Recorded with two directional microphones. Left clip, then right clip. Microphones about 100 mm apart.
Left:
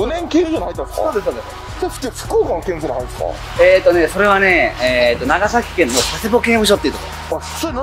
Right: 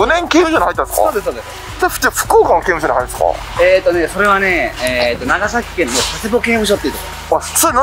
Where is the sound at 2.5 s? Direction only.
50° left (ahead or behind).